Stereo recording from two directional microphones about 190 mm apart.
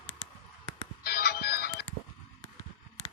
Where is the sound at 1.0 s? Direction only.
55° left (ahead or behind).